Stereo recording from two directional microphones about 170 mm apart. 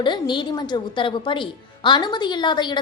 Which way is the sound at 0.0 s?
25° left (ahead or behind).